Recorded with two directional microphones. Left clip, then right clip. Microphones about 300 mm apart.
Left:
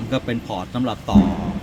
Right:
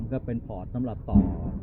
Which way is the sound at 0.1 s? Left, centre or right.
Centre.